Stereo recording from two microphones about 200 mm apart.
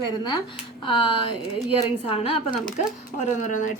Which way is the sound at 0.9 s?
25° left (ahead or behind).